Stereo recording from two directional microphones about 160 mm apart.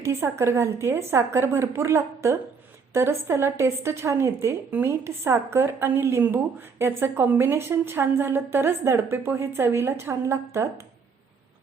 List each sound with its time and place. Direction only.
0.0 s a woman's voice: 15° right (ahead or behind)